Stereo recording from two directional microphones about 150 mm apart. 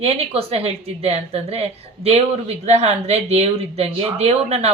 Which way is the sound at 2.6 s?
45° right (ahead or behind).